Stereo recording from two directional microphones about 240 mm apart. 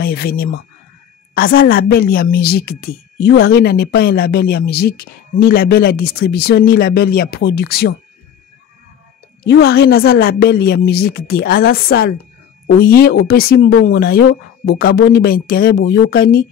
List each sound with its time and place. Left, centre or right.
0.0 s a woman's voice: left
9.5 s a woman's voice: left